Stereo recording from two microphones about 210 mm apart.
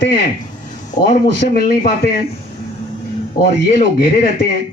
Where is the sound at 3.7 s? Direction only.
30° left (ahead or behind).